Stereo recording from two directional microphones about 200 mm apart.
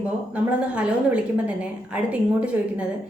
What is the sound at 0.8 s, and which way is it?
A woman's voice, 5° right (ahead or behind).